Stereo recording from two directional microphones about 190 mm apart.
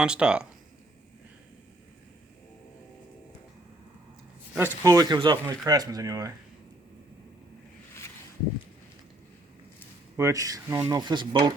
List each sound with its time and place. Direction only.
0.0 s speech: 5° right (ahead or behind)
4.5 s speech: 15° right (ahead or behind)
10.2 s speech: 15° right (ahead or behind)